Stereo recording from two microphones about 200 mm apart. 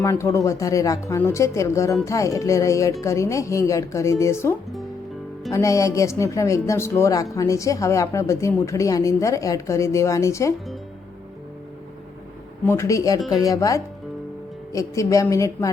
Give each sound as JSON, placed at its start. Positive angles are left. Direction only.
{"t": 0.0, "sound": "a woman's voice", "side_deg": 15}
{"t": 12.6, "sound": "a woman's voice", "side_deg": 15}